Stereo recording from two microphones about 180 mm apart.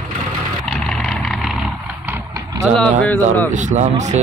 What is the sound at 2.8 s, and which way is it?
Speech, 10° left (ahead or behind).